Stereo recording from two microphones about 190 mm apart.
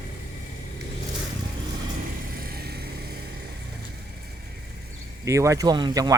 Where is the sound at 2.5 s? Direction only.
55° right (ahead or behind).